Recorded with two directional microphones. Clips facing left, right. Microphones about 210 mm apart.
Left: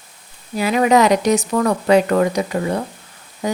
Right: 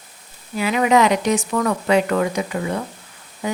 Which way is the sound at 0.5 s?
40° left (ahead or behind).